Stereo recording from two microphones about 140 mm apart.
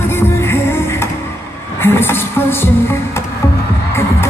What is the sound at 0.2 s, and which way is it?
Music, 20° left (ahead or behind).